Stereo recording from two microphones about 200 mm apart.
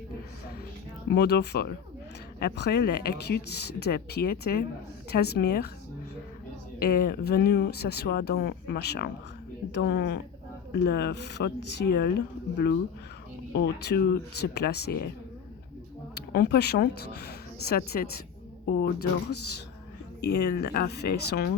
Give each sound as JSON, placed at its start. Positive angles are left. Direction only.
{"t": 1.1, "sound": "speech", "side_deg": 55}
{"t": 6.7, "sound": "speech", "side_deg": 50}
{"t": 16.1, "sound": "speech", "side_deg": 50}
{"t": 20.2, "sound": "speech", "side_deg": 55}